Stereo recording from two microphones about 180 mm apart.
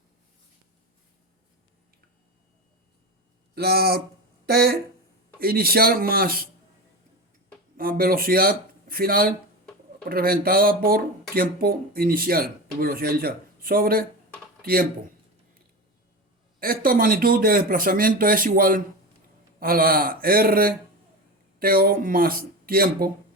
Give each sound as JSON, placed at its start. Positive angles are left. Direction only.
{"t": 3.5, "sound": "speech", "side_deg": -60}
{"t": 7.8, "sound": "speech", "side_deg": -55}
{"t": 16.6, "sound": "speech", "side_deg": -55}